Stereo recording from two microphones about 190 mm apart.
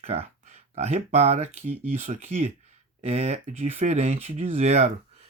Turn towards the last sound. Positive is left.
turn(degrees=-35)  # may be behind; listen again after turning